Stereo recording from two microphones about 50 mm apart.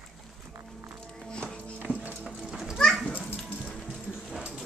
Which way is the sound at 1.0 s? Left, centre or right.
Centre.